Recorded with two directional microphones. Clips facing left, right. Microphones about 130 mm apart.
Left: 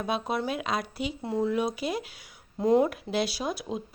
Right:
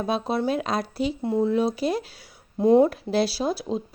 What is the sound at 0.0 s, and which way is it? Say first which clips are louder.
Speech: right 5 dB; 30° right (ahead or behind).